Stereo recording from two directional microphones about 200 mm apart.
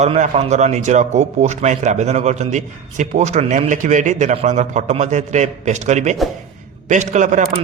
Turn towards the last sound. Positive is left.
turn(degrees=-40)  # may be behind; listen again after turning